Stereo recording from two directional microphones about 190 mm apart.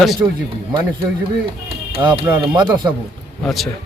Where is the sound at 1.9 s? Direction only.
30° right (ahead or behind).